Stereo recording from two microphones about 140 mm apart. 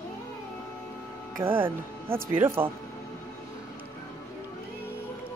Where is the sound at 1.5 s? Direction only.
15° right (ahead or behind).